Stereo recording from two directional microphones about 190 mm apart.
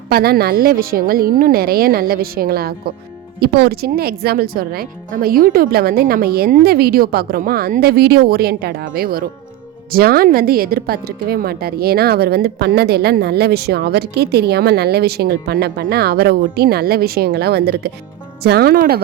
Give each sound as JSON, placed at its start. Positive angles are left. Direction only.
{"t": 0.1, "sound": "a woman's voice", "side_deg": -55}